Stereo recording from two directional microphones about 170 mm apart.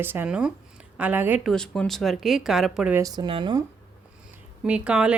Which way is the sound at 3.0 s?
25° right (ahead or behind).